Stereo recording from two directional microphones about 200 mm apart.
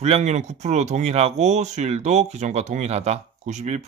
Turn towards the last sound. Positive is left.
turn(degrees=-35)  # may be behind; listen again after turning